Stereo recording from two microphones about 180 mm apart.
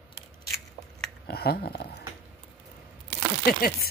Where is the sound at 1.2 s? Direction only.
60° left (ahead or behind).